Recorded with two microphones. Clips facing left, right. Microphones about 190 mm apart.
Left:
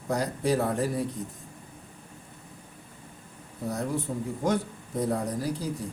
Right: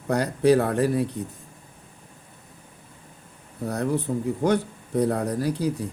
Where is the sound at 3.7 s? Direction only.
65° right (ahead or behind).